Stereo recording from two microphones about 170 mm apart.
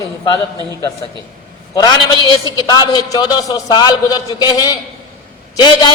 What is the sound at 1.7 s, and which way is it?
A man's voice, 25° left (ahead or behind).